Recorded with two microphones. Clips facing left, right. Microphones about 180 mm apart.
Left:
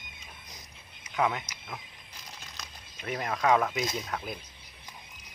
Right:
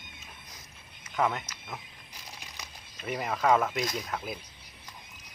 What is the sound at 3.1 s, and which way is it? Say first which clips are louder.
Speech: even; 5° right (ahead or behind).